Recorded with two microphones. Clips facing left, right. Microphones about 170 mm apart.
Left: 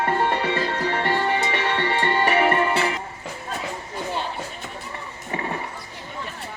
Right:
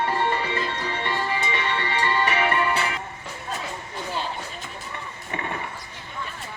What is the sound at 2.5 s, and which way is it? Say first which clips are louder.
Music: left 3 dB; 40° left (ahead or behind).